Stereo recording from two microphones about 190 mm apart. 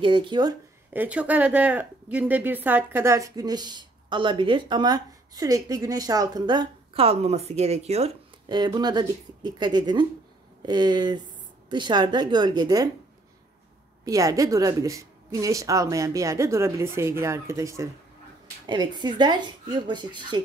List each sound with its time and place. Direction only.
0.0 s a woman's voice: 25° right (ahead or behind)
0.9 s a woman's voice: 10° right (ahead or behind); by 8.1 s 35° right (ahead or behind)
8.5 s a woman's voice: 20° right (ahead or behind)
14.0 s a woman's voice: 15° right (ahead or behind)